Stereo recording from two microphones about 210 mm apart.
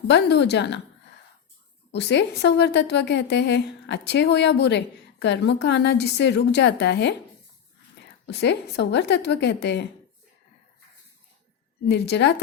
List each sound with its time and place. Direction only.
0.1 s a woman's voice: 55° left (ahead or behind)
1.9 s a woman's voice: 55° left (ahead or behind)
8.3 s a woman's voice: 55° left (ahead or behind)
11.9 s a woman's voice: 55° left (ahead or behind)